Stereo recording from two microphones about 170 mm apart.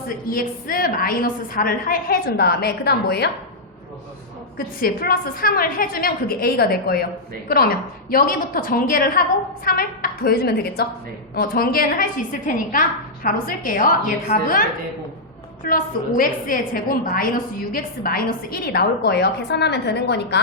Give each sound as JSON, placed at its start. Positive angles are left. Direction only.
{"t": 0.1, "sound": "a woman's voice", "side_deg": 55}
{"t": 4.5, "sound": "a woman's voice", "side_deg": 60}
{"t": 15.6, "sound": "a woman's voice", "side_deg": 55}